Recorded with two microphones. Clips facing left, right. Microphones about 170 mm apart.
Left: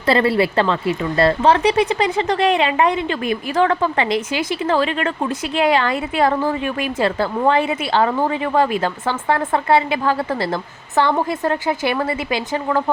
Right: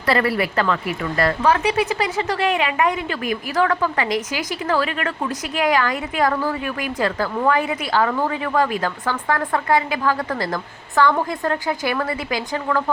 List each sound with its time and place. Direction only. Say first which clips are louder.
0.0 s speech: left 4 dB; 25° left (ahead or behind)